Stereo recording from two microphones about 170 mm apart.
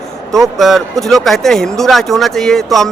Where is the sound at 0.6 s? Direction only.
Centre (ahead or behind).